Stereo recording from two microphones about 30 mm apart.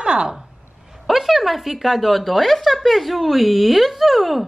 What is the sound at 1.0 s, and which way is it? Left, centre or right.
A woman's voice, centre.